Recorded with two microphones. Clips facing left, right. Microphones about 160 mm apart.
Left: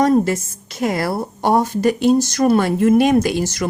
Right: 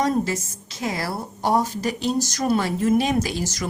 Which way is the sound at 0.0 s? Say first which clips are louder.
Left 7 dB; 55° left (ahead or behind).